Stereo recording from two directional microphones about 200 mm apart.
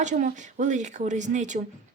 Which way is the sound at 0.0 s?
35° right (ahead or behind).